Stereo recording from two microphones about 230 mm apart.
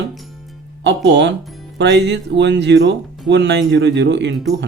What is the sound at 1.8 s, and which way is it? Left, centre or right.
Speech, right.